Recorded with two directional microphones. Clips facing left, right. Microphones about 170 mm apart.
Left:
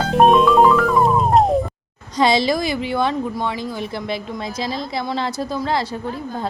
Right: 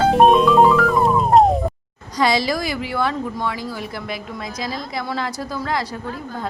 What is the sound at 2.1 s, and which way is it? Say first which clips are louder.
A woman's voice: left 2 dB; 25° left (ahead or behind).